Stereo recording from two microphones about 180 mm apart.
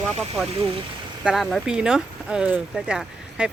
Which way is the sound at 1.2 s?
Centre (ahead or behind).